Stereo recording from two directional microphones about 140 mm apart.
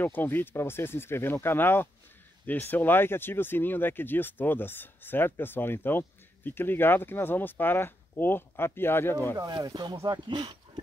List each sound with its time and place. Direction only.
0.0 s speech: 15° left (ahead or behind)
9.4 s speech: 30° right (ahead or behind)